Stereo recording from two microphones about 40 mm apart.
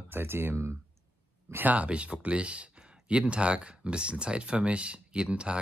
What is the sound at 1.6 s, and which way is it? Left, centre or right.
Speech, right.